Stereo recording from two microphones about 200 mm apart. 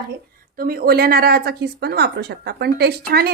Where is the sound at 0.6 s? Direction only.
50° right (ahead or behind).